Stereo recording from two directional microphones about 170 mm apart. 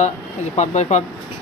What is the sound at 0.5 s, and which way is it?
Speech, 40° left (ahead or behind).